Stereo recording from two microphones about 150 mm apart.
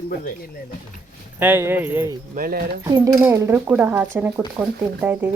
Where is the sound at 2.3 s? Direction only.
75° right (ahead or behind).